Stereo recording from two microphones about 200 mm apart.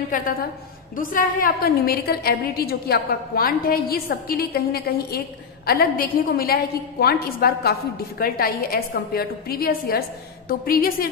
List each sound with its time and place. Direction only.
0.1 s a woman's voice: 45° left (ahead or behind)